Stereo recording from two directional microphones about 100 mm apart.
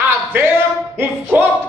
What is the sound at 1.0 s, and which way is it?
Speech, 20° right (ahead or behind).